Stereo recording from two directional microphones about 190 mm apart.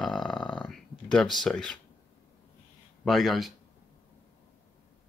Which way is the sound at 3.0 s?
Centre (ahead or behind).